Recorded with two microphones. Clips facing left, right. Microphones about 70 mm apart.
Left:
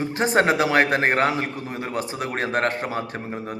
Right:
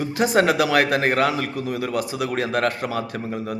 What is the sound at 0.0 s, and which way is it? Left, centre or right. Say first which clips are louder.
A man's voice: right 1 dB; left.